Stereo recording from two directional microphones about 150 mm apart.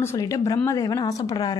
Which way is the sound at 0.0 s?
20° left (ahead or behind).